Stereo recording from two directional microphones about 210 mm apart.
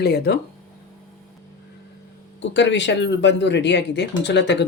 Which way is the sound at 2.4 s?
60° left (ahead or behind).